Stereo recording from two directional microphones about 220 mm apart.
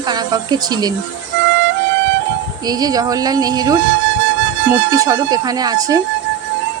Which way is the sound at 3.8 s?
55° right (ahead or behind).